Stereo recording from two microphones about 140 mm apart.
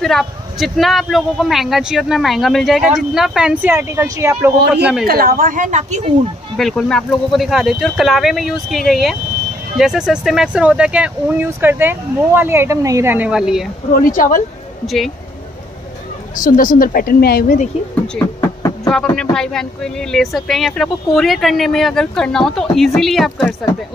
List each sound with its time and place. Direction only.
0.0 s speech: centre (ahead or behind)
3.7 s speech: 20° right (ahead or behind)
5.0 s a woman's voice: 90° right; by 6.1 s 55° right (ahead or behind)
6.5 s speech: 5° left (ahead or behind)
13.9 s speech: 80° left
16.3 s a woman's voice: 75° left (ahead or behind)
18.9 s speech: 5° left (ahead or behind)